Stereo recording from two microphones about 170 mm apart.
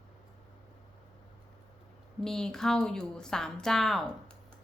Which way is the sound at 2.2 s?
5° left (ahead or behind).